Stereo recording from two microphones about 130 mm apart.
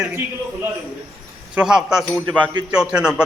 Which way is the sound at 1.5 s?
5° right (ahead or behind).